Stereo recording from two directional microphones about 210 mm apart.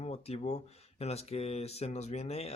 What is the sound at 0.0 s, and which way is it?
Speech, 30° left (ahead or behind).